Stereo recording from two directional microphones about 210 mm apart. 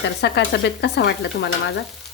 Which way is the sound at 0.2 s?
55° left (ahead or behind).